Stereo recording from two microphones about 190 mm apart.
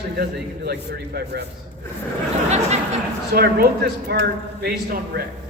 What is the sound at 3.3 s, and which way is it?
A man's voice, 55° right (ahead or behind).